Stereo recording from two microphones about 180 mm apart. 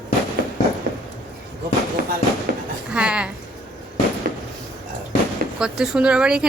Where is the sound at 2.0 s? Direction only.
55° right (ahead or behind).